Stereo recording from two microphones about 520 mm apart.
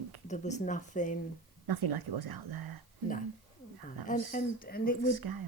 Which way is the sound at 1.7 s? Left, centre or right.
Right.